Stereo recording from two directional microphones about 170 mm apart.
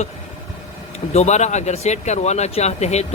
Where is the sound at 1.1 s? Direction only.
40° left (ahead or behind).